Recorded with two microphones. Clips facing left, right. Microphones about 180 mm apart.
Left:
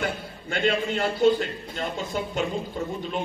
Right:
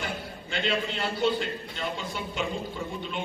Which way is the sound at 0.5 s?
50° left (ahead or behind).